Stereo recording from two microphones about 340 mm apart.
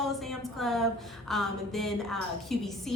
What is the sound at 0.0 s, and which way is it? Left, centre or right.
A woman's voice, centre.